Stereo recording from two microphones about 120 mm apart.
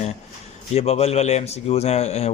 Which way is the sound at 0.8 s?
60° left (ahead or behind).